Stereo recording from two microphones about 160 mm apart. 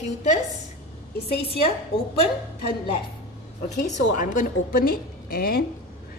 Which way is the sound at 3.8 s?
50° left (ahead or behind).